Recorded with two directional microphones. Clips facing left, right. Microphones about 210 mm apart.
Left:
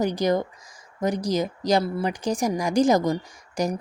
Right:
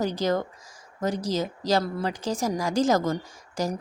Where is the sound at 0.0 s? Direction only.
15° left (ahead or behind).